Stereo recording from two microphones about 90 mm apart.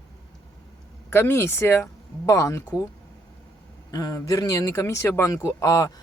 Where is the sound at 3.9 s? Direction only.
45° left (ahead or behind).